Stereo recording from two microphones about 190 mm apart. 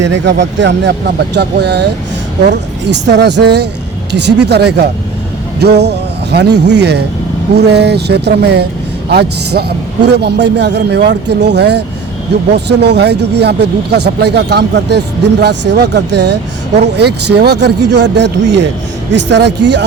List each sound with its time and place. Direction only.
0.0 s speech: 70° right (ahead or behind)